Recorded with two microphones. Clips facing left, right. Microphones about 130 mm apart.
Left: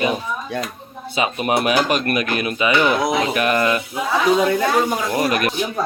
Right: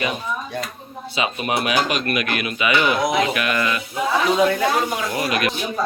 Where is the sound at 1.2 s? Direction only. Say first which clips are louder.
Left 3 dB; 45° left (ahead or behind).